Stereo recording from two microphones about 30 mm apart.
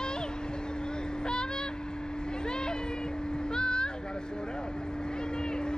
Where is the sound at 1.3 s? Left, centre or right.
Left.